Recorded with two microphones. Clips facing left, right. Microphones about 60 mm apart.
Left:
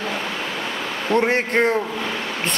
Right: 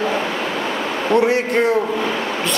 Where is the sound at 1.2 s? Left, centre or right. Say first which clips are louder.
Right 2 dB; left.